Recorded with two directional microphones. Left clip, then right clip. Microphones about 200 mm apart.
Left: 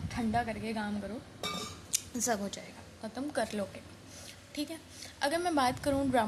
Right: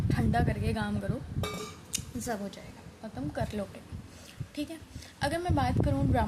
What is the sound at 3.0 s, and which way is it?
A woman's voice, centre (ahead or behind).